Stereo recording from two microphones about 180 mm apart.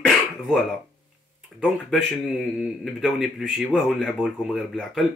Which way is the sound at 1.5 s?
Centre (ahead or behind).